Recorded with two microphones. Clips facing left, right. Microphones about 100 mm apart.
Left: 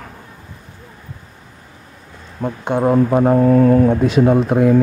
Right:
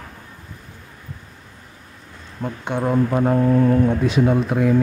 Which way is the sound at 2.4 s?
40° left (ahead or behind).